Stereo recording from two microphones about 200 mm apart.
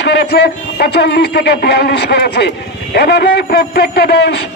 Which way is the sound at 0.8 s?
55° left (ahead or behind).